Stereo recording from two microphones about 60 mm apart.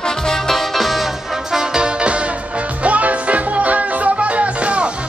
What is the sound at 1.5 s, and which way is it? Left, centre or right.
Music, centre.